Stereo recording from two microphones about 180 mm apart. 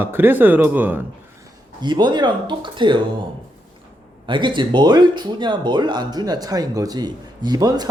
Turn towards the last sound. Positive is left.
turn(degrees=-20)  # may be behind; listen again after turning